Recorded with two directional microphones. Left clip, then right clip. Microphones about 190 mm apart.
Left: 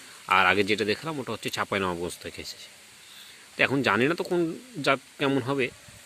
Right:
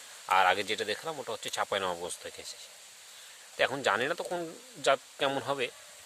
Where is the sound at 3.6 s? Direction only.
Centre (ahead or behind).